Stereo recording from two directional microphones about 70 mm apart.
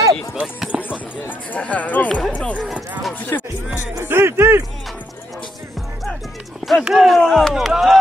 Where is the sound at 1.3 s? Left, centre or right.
Left.